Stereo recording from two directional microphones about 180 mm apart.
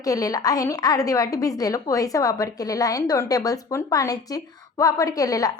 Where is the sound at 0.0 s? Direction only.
20° left (ahead or behind).